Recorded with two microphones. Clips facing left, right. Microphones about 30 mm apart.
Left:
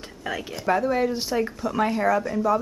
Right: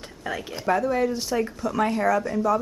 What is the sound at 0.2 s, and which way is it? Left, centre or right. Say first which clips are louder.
A woman's voice: even; centre.